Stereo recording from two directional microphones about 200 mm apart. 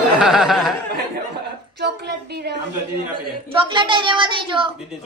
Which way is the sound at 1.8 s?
55° right (ahead or behind).